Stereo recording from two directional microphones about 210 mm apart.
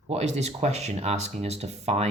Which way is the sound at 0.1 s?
30° right (ahead or behind).